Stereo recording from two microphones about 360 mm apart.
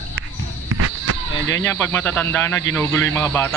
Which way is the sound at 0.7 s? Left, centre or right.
Right.